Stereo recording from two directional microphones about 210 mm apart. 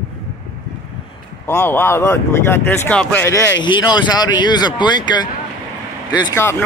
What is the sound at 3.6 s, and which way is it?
Speech, 20° left (ahead or behind).